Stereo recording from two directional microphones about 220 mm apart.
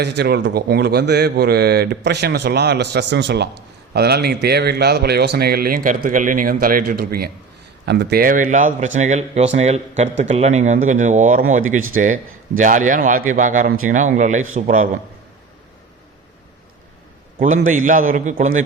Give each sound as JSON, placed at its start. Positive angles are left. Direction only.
{"t": 0.2, "sound": "speech", "side_deg": -50}
{"t": 17.4, "sound": "speech", "side_deg": -35}